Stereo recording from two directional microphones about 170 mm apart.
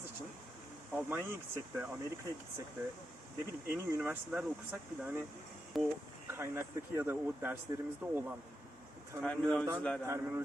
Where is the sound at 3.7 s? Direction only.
10° right (ahead or behind).